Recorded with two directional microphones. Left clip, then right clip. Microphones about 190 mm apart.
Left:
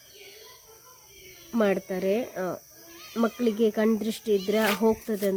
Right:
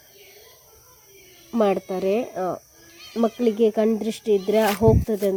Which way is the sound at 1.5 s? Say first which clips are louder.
Right 4 dB; 15° right (ahead or behind).